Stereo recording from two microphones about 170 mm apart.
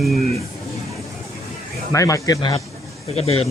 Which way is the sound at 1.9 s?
20° left (ahead or behind).